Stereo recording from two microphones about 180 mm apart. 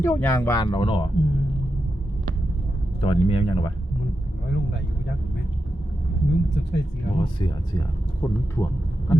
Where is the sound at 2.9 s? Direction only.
30° left (ahead or behind).